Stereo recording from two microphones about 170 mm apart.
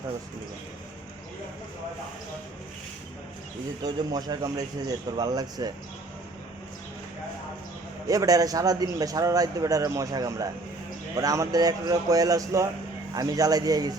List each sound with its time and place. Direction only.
3.8 s a man's voice: 25° right (ahead or behind)
8.0 s a man's voice: 20° right (ahead or behind)